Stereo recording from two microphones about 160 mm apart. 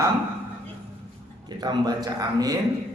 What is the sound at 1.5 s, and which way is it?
A man's voice, 25° right (ahead or behind).